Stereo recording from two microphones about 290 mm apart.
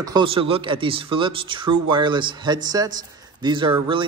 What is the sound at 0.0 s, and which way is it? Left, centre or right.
A man's voice, centre.